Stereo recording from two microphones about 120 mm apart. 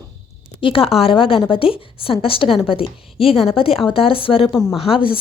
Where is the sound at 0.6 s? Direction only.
50° left (ahead or behind).